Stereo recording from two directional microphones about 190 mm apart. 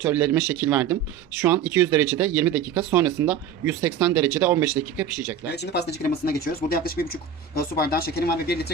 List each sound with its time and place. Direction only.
0.0 s speech: 5° right (ahead or behind)
5.5 s speech: 60° left (ahead or behind)